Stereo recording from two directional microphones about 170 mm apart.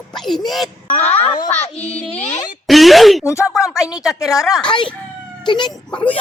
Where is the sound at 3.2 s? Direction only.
15° left (ahead or behind).